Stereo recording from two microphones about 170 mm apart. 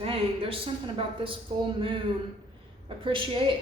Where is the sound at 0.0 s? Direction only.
30° right (ahead or behind).